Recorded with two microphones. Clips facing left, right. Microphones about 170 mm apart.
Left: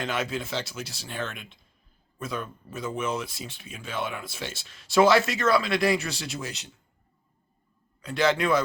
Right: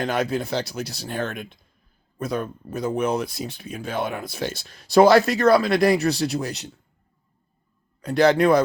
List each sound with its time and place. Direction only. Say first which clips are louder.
0.0 s speech: right 6 dB; 40° right (ahead or behind)
8.0 s speech: right 7 dB; 40° right (ahead or behind)